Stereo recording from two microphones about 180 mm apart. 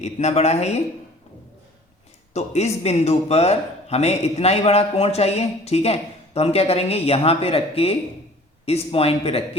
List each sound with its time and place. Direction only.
0.0 s a man's voice: 40° left (ahead or behind)
2.3 s a man's voice: 35° left (ahead or behind)